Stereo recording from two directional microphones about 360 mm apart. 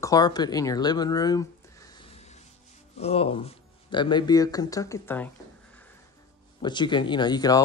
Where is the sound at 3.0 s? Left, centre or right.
Centre.